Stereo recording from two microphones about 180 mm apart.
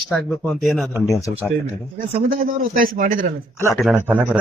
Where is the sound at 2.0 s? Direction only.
50° right (ahead or behind).